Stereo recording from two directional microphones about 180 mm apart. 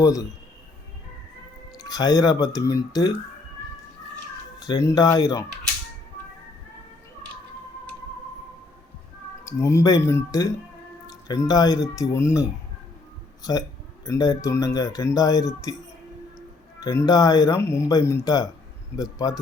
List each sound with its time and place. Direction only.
0.0 s speech: 20° left (ahead or behind)
1.8 s speech: 20° left (ahead or behind)
4.6 s speech: 20° left (ahead or behind)
9.5 s speech: 15° left (ahead or behind)
16.8 s speech: 20° left (ahead or behind)